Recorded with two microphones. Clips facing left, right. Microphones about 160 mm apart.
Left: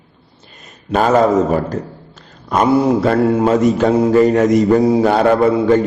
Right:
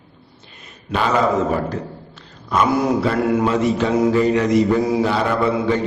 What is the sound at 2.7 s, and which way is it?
Speech, 30° left (ahead or behind).